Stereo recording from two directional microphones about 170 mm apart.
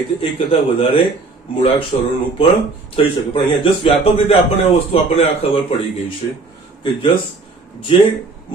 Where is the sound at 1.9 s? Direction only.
40° left (ahead or behind).